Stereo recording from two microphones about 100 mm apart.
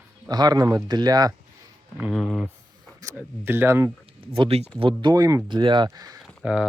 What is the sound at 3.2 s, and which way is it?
Speech, 20° right (ahead or behind).